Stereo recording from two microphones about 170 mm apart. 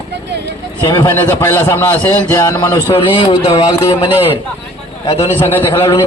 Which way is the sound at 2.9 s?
30° left (ahead or behind).